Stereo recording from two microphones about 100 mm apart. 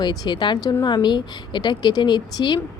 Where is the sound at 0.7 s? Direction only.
40° left (ahead or behind).